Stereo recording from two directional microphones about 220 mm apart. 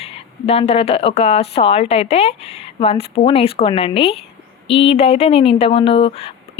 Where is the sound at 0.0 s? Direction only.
25° left (ahead or behind).